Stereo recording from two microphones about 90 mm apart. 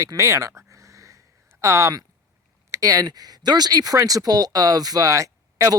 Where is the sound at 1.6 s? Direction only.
35° right (ahead or behind).